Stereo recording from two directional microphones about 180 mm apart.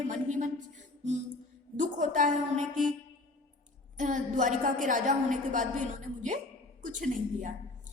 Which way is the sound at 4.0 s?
45° right (ahead or behind).